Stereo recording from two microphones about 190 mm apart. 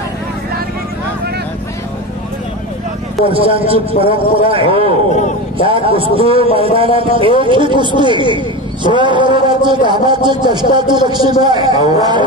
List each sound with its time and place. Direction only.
3.3 s speech: 30° right (ahead or behind)